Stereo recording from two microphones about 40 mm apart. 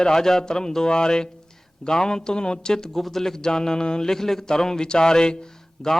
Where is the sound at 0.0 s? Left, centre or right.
Centre.